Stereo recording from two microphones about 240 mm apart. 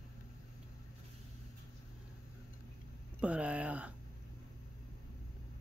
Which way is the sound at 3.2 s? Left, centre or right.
Centre.